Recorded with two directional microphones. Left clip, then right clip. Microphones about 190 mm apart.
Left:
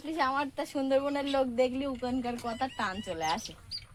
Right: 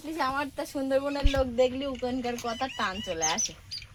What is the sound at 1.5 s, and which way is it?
Speech, 15° right (ahead or behind).